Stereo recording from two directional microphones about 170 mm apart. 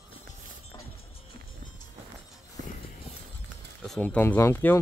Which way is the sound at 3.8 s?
5° left (ahead or behind).